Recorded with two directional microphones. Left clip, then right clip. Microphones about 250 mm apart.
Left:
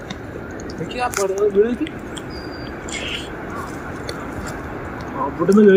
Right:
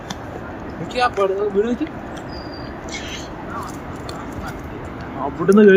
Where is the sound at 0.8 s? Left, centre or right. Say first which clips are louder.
Right 3 dB; right.